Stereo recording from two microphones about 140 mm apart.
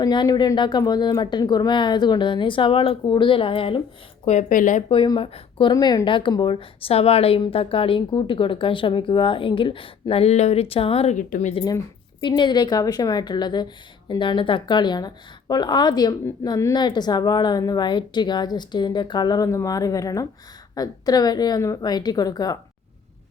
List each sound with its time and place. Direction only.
0.0 s a woman's voice: 30° left (ahead or behind)
4.3 s a woman's voice: 65° left (ahead or behind)
4.9 s a woman's voice: 35° left (ahead or behind)
5.7 s a woman's voice: 25° left (ahead or behind); by 11.2 s 45° left (ahead or behind)
11.2 s a woman's voice: 65° left (ahead or behind)
12.2 s a woman's voice: 35° left (ahead or behind)